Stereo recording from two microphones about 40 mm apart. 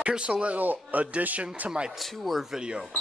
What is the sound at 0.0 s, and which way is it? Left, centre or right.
Speech, right.